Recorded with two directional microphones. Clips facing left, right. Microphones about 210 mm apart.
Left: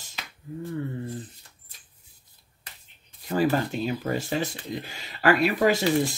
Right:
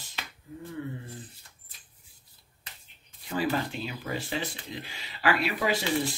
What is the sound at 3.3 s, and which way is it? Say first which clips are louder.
Speech: left 5 dB; 45° left (ahead or behind).